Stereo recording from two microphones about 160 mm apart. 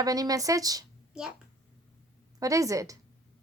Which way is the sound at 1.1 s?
5° right (ahead or behind).